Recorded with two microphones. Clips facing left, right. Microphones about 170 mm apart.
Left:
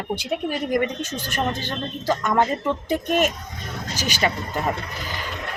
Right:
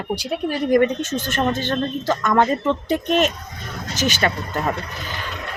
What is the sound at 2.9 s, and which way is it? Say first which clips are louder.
Speech: right 1 dB; 10° left (ahead or behind).